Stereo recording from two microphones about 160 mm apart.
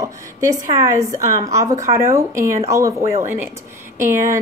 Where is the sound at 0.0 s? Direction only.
20° right (ahead or behind).